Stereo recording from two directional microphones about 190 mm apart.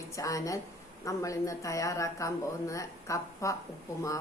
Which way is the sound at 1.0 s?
15° left (ahead or behind).